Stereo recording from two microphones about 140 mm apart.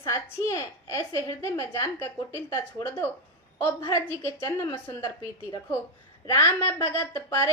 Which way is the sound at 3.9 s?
20° left (ahead or behind).